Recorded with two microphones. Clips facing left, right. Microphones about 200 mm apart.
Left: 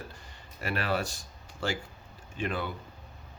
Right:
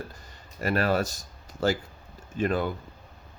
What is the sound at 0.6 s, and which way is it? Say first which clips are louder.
Speech: right 6 dB; 40° right (ahead or behind).